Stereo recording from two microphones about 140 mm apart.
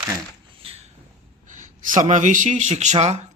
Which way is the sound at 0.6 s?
45° right (ahead or behind).